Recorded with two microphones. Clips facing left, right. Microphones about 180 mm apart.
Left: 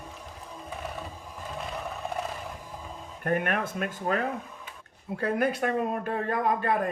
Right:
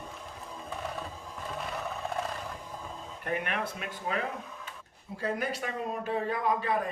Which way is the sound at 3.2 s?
50° left (ahead or behind).